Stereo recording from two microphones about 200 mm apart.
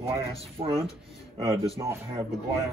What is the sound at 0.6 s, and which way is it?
Speech, 30° right (ahead or behind).